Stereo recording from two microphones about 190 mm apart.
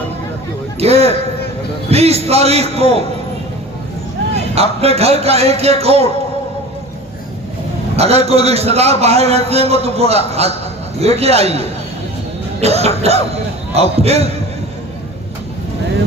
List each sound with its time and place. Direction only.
0.8 s a man's voice: 35° right (ahead or behind)
4.4 s a man's voice: 30° right (ahead or behind)
7.9 s a man's voice: 35° right (ahead or behind)